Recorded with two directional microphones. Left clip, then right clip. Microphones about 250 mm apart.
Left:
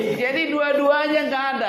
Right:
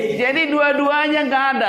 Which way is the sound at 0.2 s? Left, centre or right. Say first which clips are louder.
Right 5 dB; right.